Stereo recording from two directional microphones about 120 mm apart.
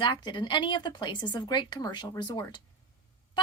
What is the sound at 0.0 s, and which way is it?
A woman's voice, 40° left (ahead or behind).